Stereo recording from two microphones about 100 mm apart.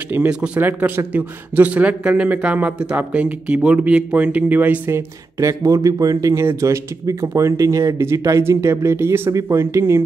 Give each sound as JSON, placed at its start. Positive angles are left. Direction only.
{"t": 0.1, "sound": "a man's voice", "side_deg": -15}